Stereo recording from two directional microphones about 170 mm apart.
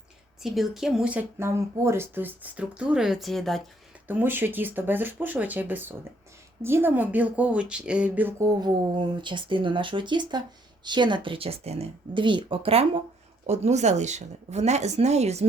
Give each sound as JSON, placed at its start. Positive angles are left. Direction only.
{"t": 0.4, "sound": "speech", "side_deg": 0}
{"t": 4.0, "sound": "speech", "side_deg": -10}